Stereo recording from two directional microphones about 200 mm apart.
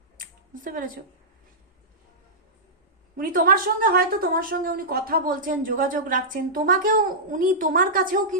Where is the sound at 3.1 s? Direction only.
45° right (ahead or behind).